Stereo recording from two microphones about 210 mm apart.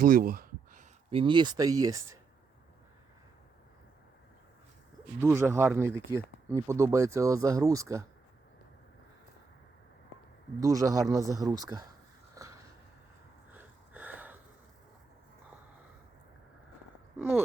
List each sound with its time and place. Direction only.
0.0 s a sound: 40° right (ahead or behind)
1.1 s speech: 25° right (ahead or behind)
5.2 s speech: 10° right (ahead or behind)
10.6 s speech: 15° right (ahead or behind)
12.4 s a sound: 15° right (ahead or behind)
17.2 s speech: 10° right (ahead or behind)